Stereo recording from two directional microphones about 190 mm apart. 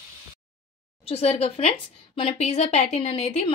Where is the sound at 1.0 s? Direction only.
30° left (ahead or behind).